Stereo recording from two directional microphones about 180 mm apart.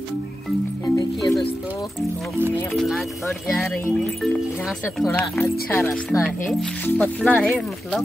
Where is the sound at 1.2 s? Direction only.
25° left (ahead or behind).